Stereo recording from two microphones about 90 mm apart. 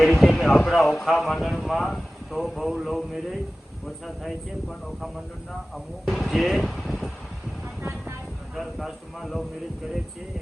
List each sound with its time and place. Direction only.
0.0 s speech: centre (ahead or behind)
7.6 s vehicle: 20° right (ahead or behind)
8.5 s speech: centre (ahead or behind)